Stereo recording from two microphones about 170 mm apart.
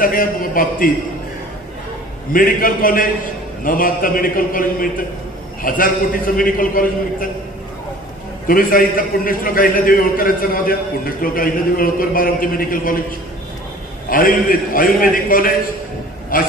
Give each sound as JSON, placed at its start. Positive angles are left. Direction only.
{"t": 0.0, "sound": "a man's voice", "side_deg": 55}
{"t": 2.3, "sound": "a man's voice", "side_deg": 55}
{"t": 8.5, "sound": "a man's voice", "side_deg": 55}
{"t": 14.0, "sound": "a man's voice", "side_deg": 55}